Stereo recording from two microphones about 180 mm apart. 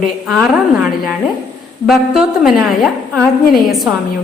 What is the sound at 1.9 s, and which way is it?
A woman's voice, centre (ahead or behind).